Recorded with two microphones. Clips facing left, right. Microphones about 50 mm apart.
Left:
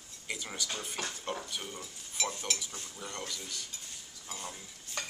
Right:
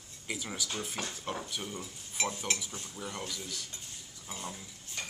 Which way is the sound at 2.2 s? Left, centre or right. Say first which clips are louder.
Right 2 dB; right.